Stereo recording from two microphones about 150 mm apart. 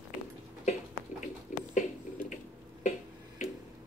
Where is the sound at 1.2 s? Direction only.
55° left (ahead or behind).